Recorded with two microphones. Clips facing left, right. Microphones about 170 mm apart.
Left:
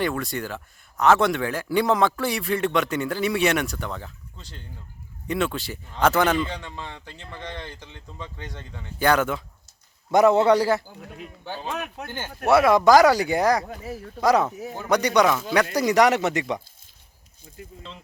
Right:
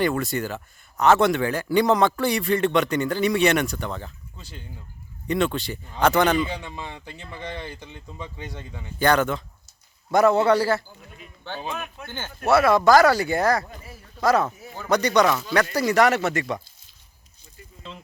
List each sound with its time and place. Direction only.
0.0 s speech: centre (ahead or behind)
5.3 s speech: 5° left (ahead or behind)
6.3 s speech: 10° right (ahead or behind)
9.0 s speech: 5° left (ahead or behind)
10.1 s speech: 20° left (ahead or behind)
11.0 s speech: 70° left (ahead or behind)
12.0 s speech: 10° left (ahead or behind)
13.7 s speech: 80° left
14.2 s speech: 15° left (ahead or behind)